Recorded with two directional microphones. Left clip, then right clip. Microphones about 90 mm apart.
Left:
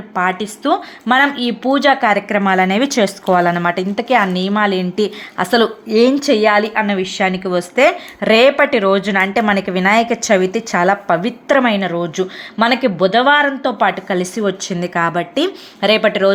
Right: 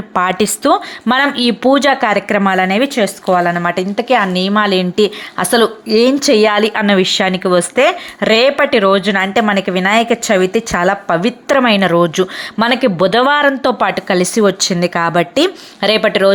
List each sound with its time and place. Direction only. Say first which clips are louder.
0.1 s speech: right 4 dB; 70° right (ahead or behind); by 2.4 s 35° right (ahead or behind)
2.6 s a woman's voice: right 1 dB; 15° right (ahead or behind)
5.4 s a woman's voice: right 2 dB; 40° right (ahead or behind)
6.5 s speech: right 2 dB; 60° right (ahead or behind)
7.4 s a woman's voice: right 1 dB; 35° right (ahead or behind); by 13.7 s 75° right (ahead or behind)
14.1 s speech: right 6 dB; 45° right (ahead or behind)
15.8 s a woman's voice: right 1 dB; 35° right (ahead or behind)